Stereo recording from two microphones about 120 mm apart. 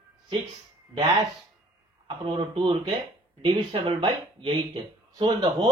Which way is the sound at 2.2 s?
45° right (ahead or behind).